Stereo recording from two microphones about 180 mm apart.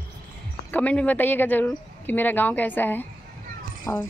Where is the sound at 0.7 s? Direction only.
10° left (ahead or behind).